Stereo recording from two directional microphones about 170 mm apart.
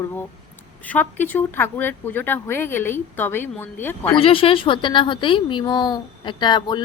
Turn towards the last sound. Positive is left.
turn(degrees=25)  # may be behind; listen again after turning